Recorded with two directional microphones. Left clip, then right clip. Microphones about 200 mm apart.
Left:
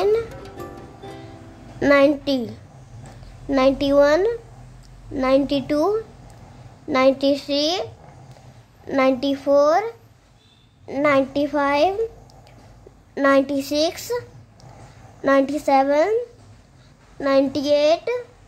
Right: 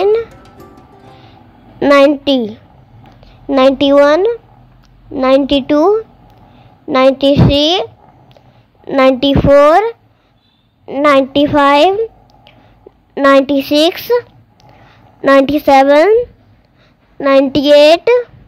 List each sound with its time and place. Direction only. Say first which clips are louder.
0.0 s music: right 8 dB; 20° right (ahead or behind)
0.3 s music: left 2 dB; centre (ahead or behind)
1.8 s a woman's voice: right 8 dB; 25° right (ahead or behind)
8.9 s a woman's voice: right 10 dB; 30° right (ahead or behind)
13.2 s speech: right 9 dB; 25° right (ahead or behind)
17.2 s a woman's voice: right 9 dB; 25° right (ahead or behind)